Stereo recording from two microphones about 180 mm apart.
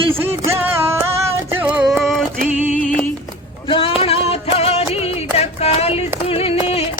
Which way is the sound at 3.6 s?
30° left (ahead or behind).